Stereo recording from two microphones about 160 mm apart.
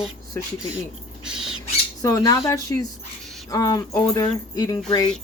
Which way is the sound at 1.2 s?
5° right (ahead or behind).